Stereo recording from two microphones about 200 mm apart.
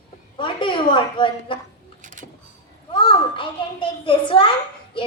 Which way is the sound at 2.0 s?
40° right (ahead or behind).